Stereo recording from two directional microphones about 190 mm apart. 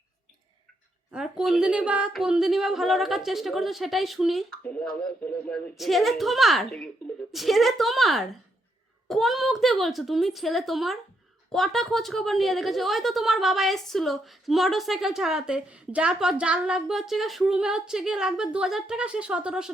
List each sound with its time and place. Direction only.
1.1 s a woman's voice: 5° right (ahead or behind)